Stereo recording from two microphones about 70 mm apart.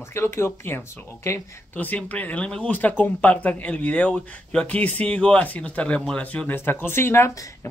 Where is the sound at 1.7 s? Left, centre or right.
Left.